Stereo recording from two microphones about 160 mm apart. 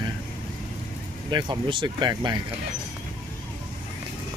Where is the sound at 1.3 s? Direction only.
30° right (ahead or behind).